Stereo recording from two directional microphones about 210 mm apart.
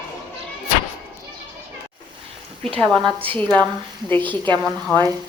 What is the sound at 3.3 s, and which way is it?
A woman's voice, 5° left (ahead or behind).